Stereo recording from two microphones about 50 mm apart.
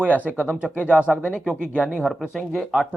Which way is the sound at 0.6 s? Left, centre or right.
Left.